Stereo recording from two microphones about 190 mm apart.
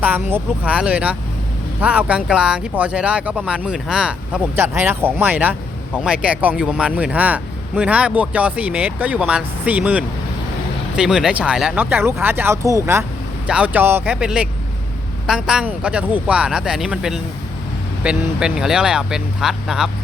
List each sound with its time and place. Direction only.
0.0 s speech: 10° right (ahead or behind)